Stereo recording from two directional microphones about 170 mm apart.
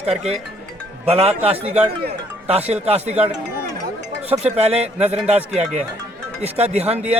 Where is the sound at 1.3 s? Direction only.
10° right (ahead or behind).